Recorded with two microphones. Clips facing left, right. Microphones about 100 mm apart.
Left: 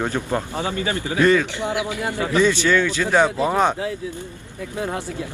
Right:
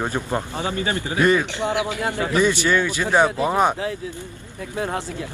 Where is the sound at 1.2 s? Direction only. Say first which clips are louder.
Left 1 dB; 20° right (ahead or behind).